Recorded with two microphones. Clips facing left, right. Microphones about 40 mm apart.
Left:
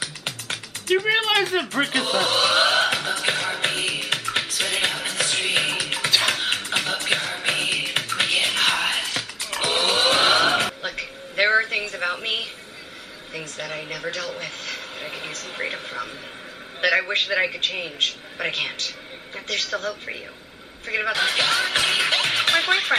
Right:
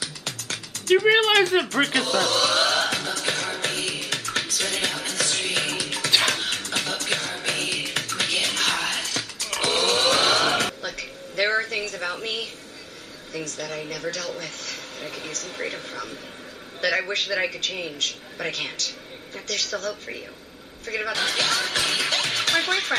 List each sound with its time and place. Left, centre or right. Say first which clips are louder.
0.0 s music: left 2 dB; left
1.0 s speech: right 3 dB; centre
1.7 s speech: right 1 dB; centre
2.0 s music: left 1 dB; left
10.8 s a sound: left 2 dB; left
13.3 s a man's voice: even; left
17.1 s a man's voice: left 3 dB; left